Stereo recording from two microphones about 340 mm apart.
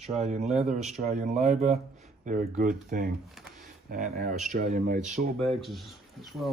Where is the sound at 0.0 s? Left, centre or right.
Centre.